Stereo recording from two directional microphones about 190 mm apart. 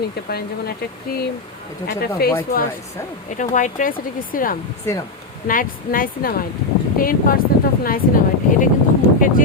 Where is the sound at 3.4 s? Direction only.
40° left (ahead or behind).